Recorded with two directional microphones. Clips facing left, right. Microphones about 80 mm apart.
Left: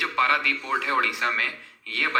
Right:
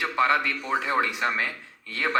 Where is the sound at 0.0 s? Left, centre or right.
Right.